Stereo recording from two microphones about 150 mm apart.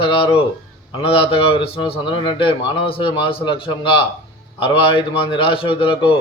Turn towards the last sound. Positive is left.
turn(degrees=35)  # may be behind; listen again after turning